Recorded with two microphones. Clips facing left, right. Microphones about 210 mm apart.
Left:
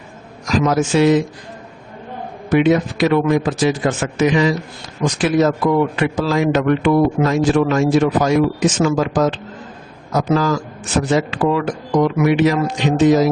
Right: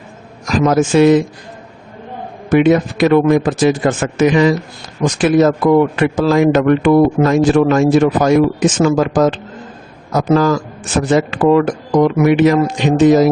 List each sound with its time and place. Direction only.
0.4 s speech: 50° right (ahead or behind)
2.5 s a man's voice: 50° right (ahead or behind)